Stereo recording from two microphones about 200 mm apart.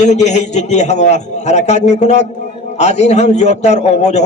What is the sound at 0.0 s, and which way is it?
A man's voice, 35° left (ahead or behind).